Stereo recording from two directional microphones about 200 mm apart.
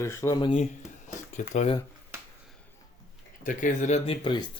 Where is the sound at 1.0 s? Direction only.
35° left (ahead or behind).